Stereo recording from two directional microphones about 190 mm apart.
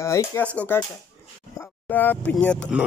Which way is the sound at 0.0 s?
15° left (ahead or behind).